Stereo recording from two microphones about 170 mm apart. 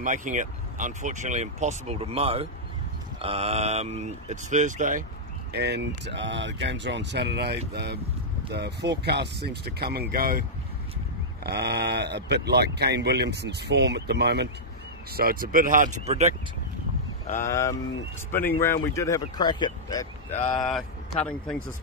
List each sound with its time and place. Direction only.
0.0 s speech: 50° right (ahead or behind)
5.5 s speech: 75° right (ahead or behind); by 10.4 s 60° right (ahead or behind)
11.4 s speech: 75° right (ahead or behind)
15.1 s speech: 60° right (ahead or behind); by 16.3 s 40° right (ahead or behind)
17.5 s speech: 15° left (ahead or behind)
20.2 s speech: 40° left (ahead or behind)
20.5 s speech: centre (ahead or behind)